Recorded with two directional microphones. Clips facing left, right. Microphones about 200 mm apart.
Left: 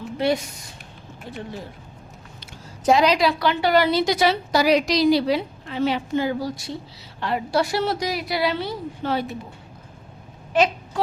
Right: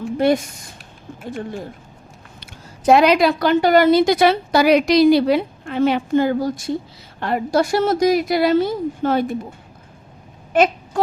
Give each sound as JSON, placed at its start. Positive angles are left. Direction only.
{"t": 0.2, "sound": "a woman's voice", "side_deg": -50}
{"t": 2.4, "sound": "a woman's voice", "side_deg": -60}
{"t": 10.5, "sound": "a sound", "side_deg": -50}